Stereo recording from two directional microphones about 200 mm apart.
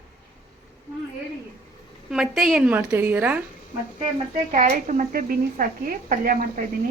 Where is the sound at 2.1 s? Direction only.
Centre (ahead or behind).